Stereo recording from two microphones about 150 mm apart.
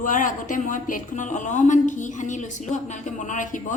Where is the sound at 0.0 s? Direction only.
60° left (ahead or behind).